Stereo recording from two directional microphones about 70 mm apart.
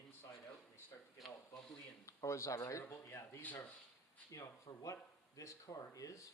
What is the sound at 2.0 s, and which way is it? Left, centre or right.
Speech, left.